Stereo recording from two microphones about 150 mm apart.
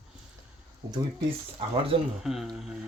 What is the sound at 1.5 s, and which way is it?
Speech, 40° right (ahead or behind).